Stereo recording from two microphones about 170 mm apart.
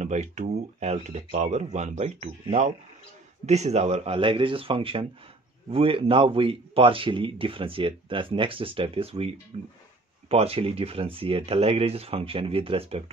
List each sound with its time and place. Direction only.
0.0 s speech: 45° right (ahead or behind)
3.4 s a man's voice: 40° right (ahead or behind)